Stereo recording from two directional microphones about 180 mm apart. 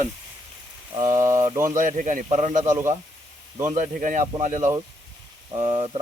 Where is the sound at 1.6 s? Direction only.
45° right (ahead or behind).